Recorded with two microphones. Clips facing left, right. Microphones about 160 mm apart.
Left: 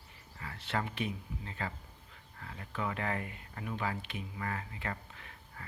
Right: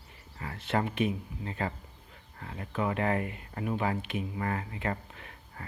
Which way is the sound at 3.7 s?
45° right (ahead or behind).